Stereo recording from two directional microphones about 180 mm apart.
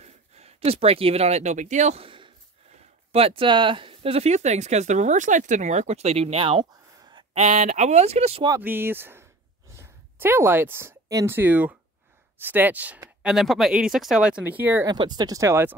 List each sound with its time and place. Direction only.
0.0 s speech: 35° right (ahead or behind)
7.3 s speech: 40° right (ahead or behind)
8.5 s speech: 10° right (ahead or behind)
14.9 s speech: 25° right (ahead or behind)